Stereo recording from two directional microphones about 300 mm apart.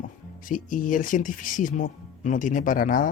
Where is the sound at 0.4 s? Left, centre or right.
Left.